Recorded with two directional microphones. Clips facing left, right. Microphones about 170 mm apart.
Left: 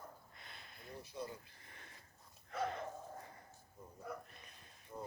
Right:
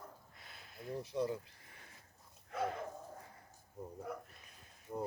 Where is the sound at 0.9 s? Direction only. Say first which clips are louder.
Right 10 dB; 85° right.